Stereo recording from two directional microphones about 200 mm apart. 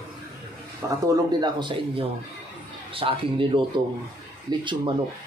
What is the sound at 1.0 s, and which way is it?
Speech, 20° right (ahead or behind).